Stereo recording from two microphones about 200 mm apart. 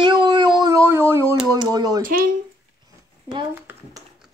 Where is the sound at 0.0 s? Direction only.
20° right (ahead or behind).